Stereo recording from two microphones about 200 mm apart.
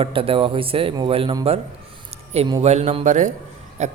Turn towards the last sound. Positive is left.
turn(degrees=-35)  # may be behind; listen again after turning